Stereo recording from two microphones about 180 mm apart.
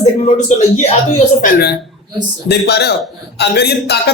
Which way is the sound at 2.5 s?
65° left (ahead or behind).